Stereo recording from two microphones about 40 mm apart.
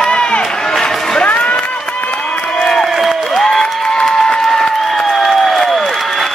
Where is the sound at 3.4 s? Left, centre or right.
Centre.